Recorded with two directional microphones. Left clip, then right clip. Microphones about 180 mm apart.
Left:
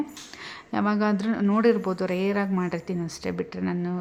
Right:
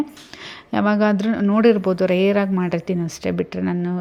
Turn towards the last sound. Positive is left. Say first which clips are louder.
# right 6 dB
turn(degrees=-20)  # may be behind; listen again after turning